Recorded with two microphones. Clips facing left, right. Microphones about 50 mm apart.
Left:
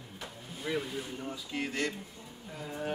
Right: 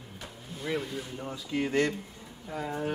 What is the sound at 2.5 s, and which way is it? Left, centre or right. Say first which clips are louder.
Speech: right 8 dB; right.